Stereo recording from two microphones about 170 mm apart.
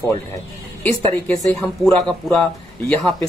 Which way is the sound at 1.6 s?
5° left (ahead or behind).